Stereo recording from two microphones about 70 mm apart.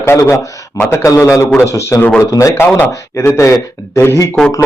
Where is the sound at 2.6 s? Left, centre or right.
Left.